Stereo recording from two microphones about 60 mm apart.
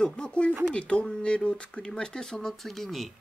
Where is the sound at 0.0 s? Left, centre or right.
Centre.